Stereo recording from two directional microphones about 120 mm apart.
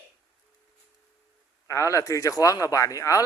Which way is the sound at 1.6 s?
25° left (ahead or behind).